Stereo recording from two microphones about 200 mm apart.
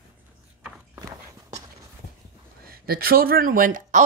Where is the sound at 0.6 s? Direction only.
15° right (ahead or behind).